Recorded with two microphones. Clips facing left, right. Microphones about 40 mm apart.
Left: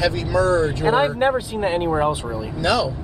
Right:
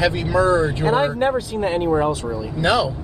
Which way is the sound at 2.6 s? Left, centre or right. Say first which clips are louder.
Right 2 dB; right.